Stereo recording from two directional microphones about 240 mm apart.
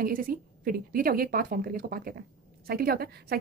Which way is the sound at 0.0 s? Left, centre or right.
Right.